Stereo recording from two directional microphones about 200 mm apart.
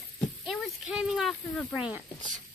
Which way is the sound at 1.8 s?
5° right (ahead or behind).